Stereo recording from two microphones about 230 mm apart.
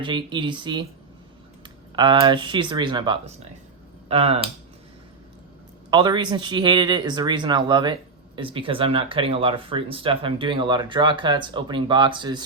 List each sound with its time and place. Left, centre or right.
0.0 s speech: right
5.9 s speech: centre